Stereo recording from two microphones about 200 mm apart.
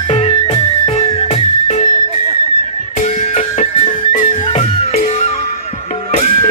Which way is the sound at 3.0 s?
35° left (ahead or behind).